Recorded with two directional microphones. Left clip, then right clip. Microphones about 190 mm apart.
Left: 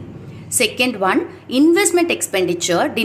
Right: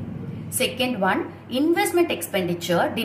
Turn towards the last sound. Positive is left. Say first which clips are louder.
# left 5 dB
turn(degrees=45)  # may be behind; listen again after turning